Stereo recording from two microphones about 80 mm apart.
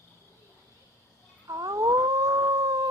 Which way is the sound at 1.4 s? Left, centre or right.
Right.